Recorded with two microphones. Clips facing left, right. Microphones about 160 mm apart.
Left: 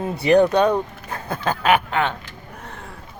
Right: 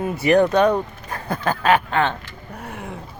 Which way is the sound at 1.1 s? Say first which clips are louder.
Right 1 dB; 15° left (ahead or behind).